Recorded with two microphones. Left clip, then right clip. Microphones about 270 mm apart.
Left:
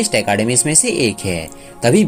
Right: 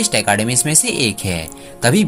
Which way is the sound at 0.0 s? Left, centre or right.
Right.